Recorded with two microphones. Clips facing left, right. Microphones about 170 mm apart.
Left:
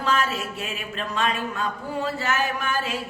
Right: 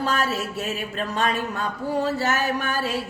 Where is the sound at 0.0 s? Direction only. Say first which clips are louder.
Even; 40° right (ahead or behind).